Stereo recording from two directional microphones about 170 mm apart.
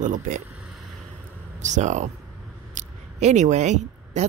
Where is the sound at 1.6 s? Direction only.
45° right (ahead or behind).